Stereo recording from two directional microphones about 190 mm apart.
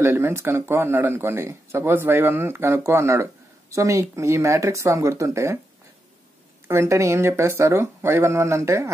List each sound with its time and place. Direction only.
0.0 s speech: 15° right (ahead or behind)
6.7 s speech: 15° right (ahead or behind)